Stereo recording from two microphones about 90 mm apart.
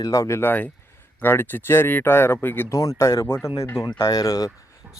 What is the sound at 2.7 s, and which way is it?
Speech, 40° left (ahead or behind).